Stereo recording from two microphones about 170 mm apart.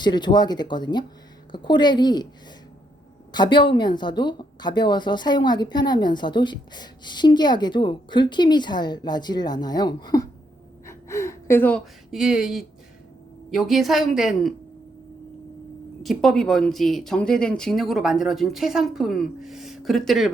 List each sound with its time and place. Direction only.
0.0 s a woman's voice: 25° left (ahead or behind)
3.3 s a woman's voice: 25° left (ahead or behind)
10.8 s gasp: 15° left (ahead or behind)
12.1 s speech: 5° right (ahead or behind)
16.0 s speech: centre (ahead or behind)